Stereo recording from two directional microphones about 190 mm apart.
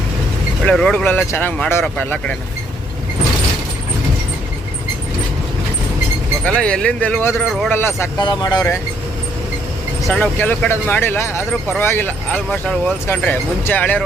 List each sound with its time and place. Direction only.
0.6 s speech: 5° left (ahead or behind)
6.4 s speech: 5° left (ahead or behind)
10.1 s speech: 10° left (ahead or behind)